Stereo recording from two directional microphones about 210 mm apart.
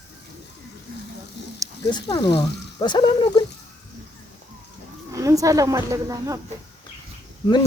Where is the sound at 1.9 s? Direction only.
20° left (ahead or behind).